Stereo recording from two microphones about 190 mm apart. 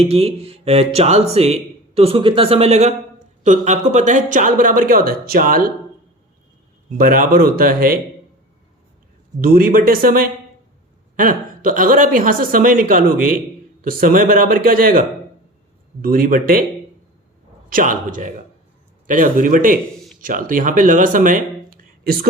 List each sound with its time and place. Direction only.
0.0 s speech: 30° right (ahead or behind); by 5.7 s 50° right (ahead or behind)
6.9 s speech: 50° right (ahead or behind)
9.4 s speech: 50° right (ahead or behind)
17.7 s speech: 45° right (ahead or behind)